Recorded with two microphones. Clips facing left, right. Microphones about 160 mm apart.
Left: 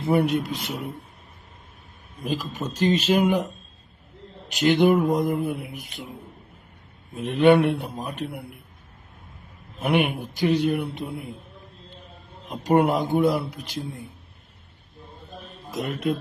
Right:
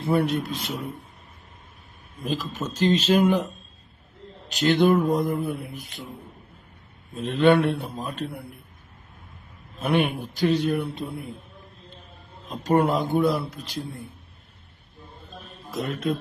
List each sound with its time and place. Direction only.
0.0 s speech: 15° left (ahead or behind)
2.2 s speech: 15° left (ahead or behind)
4.4 s speech: 15° left (ahead or behind)
7.1 s speech: 15° left (ahead or behind)
9.7 s speech: 15° left (ahead or behind)
12.5 s speech: 15° left (ahead or behind)